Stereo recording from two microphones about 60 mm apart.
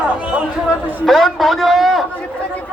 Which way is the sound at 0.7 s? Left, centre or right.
Right.